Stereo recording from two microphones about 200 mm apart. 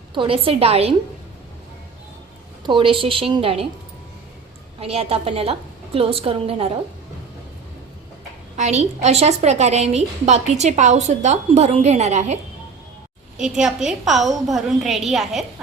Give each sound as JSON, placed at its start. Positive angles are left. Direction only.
{"t": 0.1, "sound": "a woman's voice", "side_deg": -25}
{"t": 2.6, "sound": "a woman's voice", "side_deg": -25}
{"t": 4.8, "sound": "a woman's voice", "side_deg": -30}
{"t": 8.5, "sound": "a woman's voice", "side_deg": -35}
{"t": 13.3, "sound": "a woman's voice", "side_deg": -5}